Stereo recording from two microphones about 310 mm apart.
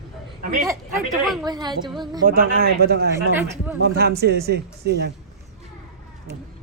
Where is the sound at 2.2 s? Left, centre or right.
Right.